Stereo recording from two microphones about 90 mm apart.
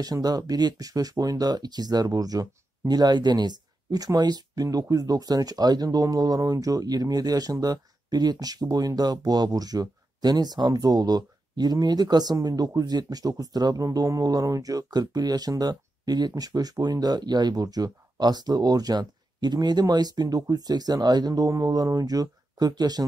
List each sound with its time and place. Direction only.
0.0 s speech: 45° right (ahead or behind)